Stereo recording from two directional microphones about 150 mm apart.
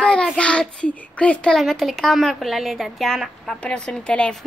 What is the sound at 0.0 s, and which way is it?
Child singing, 5° left (ahead or behind).